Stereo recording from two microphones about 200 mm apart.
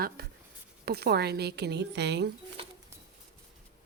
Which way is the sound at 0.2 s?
50° right (ahead or behind).